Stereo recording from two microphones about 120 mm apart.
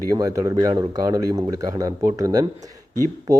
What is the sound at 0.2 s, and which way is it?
A man's voice, 30° right (ahead or behind).